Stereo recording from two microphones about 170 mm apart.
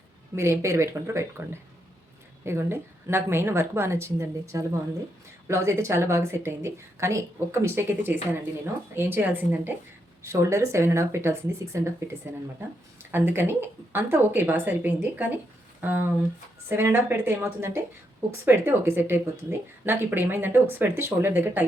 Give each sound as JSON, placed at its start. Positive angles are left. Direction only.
{"t": 0.3, "sound": "a woman's voice", "side_deg": -15}
{"t": 2.4, "sound": "a woman's voice", "side_deg": -15}
{"t": 13.1, "sound": "a woman's voice", "side_deg": -10}